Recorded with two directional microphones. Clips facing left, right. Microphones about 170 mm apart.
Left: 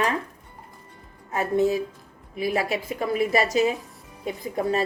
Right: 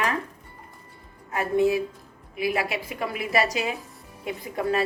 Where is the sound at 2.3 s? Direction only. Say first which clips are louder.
Left 1 dB; 40° left (ahead or behind).